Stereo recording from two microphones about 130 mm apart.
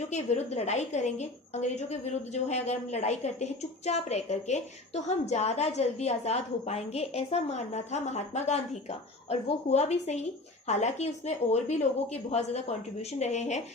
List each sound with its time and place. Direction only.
0.0 s a woman's voice: 60° left (ahead or behind)